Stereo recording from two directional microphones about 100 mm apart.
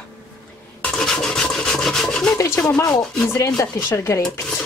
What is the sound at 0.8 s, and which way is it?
Rub, 5° left (ahead or behind).